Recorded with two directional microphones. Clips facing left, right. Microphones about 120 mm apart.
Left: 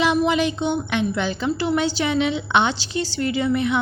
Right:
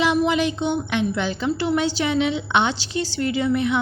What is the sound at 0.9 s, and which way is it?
A woman's voice, 55° left (ahead or behind).